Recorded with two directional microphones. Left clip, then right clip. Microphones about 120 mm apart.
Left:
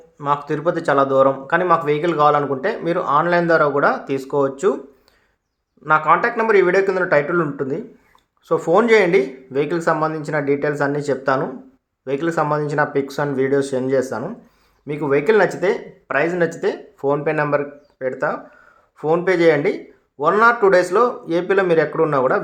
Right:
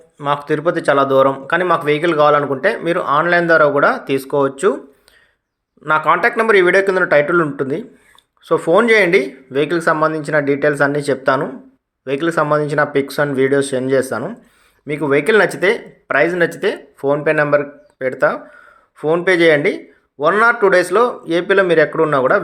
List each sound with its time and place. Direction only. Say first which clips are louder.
0.2 s a man's voice: right 3 dB; 15° right (ahead or behind)
5.8 s a man's voice: right 2 dB; 25° right (ahead or behind)
18.9 s a man's voice: right 3 dB; 5° right (ahead or behind)